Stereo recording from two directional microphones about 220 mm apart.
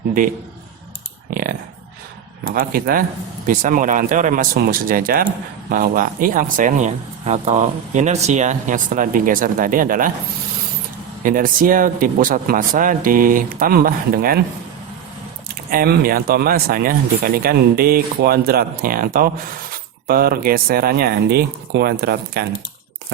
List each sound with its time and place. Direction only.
1.3 s a sound: 40° right (ahead or behind)
2.5 s speech: 40° right (ahead or behind)
11.2 s speech: 40° right (ahead or behind)
15.7 s speech: 40° right (ahead or behind)